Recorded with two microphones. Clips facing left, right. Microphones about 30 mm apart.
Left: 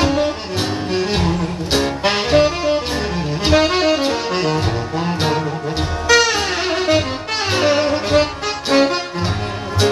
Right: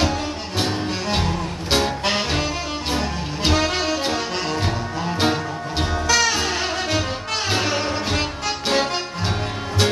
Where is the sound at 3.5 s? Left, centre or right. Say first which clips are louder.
Left 8 dB; left.